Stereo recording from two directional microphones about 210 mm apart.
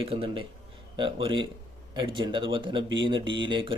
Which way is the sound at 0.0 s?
25° right (ahead or behind).